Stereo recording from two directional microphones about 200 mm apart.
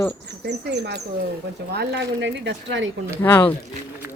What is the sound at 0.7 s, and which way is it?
Speech, 55° right (ahead or behind).